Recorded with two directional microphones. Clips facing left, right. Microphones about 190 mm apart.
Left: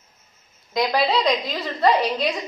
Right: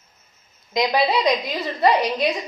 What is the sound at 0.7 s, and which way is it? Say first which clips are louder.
A woman's voice: right 1 dB; 15° right (ahead or behind).